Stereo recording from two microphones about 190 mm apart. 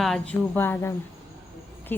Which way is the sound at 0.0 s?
5° left (ahead or behind).